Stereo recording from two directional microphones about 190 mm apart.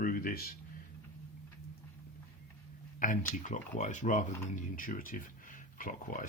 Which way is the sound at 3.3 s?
40° left (ahead or behind).